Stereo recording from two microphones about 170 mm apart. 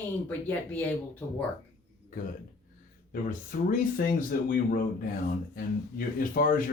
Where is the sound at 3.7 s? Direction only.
55° left (ahead or behind).